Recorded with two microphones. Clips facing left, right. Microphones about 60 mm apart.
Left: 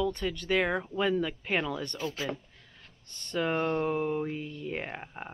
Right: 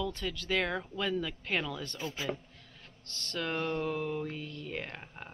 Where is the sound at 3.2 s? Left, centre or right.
Centre.